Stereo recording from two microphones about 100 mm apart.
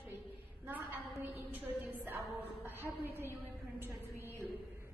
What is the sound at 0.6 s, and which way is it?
A woman's voice, 20° right (ahead or behind).